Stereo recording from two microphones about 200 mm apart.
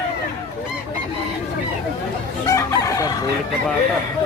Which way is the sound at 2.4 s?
15° left (ahead or behind).